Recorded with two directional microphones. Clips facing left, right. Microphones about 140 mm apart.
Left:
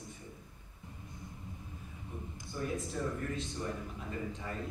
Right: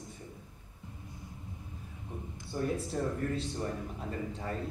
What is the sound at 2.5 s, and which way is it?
Mantra, 35° right (ahead or behind).